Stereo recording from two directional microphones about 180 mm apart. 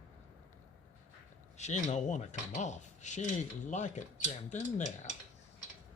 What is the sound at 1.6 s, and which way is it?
Cutlery, 40° left (ahead or behind).